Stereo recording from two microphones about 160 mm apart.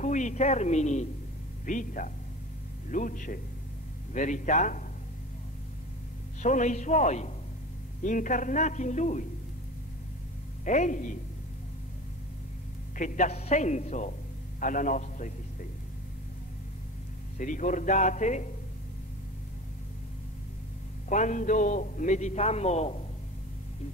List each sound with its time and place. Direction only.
0.0 s a man's voice: 50° left (ahead or behind)
6.4 s a man's voice: 50° left (ahead or behind)
10.6 s a man's voice: 50° left (ahead or behind)
12.9 s a man's voice: 55° left (ahead or behind)
17.4 s a man's voice: 55° left (ahead or behind)
21.1 s a man's voice: 50° left (ahead or behind)